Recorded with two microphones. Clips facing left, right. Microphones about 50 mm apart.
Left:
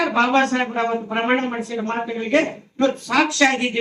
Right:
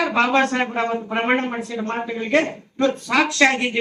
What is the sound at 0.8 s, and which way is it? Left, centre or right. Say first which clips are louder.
Speech: left 1 dB; centre.